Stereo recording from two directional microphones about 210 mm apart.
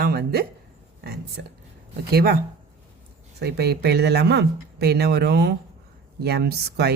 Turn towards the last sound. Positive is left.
turn(degrees=-50)  # may be behind; listen again after turning